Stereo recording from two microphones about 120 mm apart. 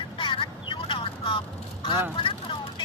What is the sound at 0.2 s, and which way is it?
Vehicle, 45° left (ahead or behind).